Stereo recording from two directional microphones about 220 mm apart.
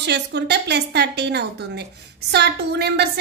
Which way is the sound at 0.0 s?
50° right (ahead or behind).